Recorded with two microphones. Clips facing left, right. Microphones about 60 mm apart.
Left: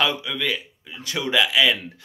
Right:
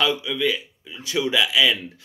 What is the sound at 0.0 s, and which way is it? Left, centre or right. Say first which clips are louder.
Speech: right 2 dB; left.